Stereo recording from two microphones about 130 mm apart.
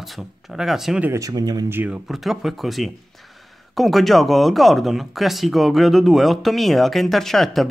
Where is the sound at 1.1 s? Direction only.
25° right (ahead or behind).